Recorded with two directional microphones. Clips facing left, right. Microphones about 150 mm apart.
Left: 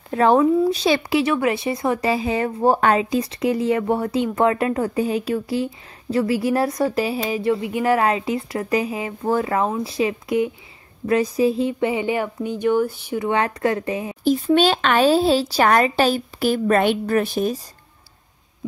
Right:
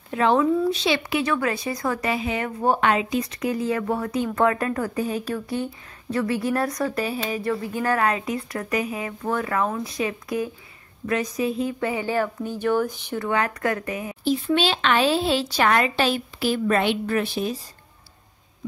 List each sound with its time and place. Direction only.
0.1 s speech: 40° left (ahead or behind)
1.2 s a woman's voice: 20° left (ahead or behind)
13.2 s a woman's voice: 25° left (ahead or behind)
14.2 s speech: 45° left (ahead or behind)